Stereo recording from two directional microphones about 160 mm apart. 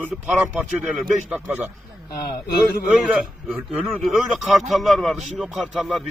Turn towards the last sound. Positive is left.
turn(degrees=0)  # may be behind; listen again after turning